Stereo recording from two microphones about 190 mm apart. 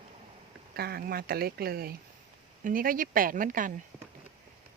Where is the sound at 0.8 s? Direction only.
55° right (ahead or behind).